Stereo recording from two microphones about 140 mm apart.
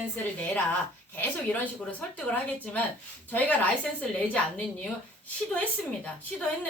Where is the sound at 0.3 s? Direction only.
10° left (ahead or behind).